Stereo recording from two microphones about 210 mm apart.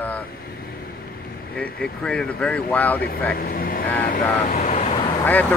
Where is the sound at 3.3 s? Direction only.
45° left (ahead or behind).